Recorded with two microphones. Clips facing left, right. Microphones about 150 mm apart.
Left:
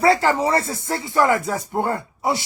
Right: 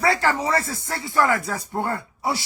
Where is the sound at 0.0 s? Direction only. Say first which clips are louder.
Left 4 dB; 20° left (ahead or behind).